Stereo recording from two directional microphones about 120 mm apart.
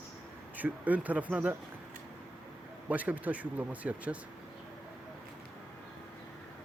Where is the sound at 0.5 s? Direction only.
15° right (ahead or behind).